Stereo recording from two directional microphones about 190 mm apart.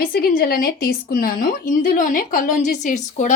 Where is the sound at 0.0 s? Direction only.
50° left (ahead or behind).